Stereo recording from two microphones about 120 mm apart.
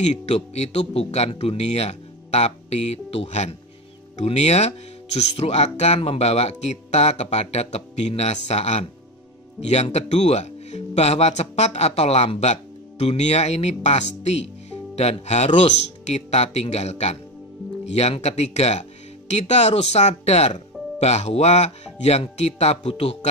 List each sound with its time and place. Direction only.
0.0 s speech: 60° left (ahead or behind)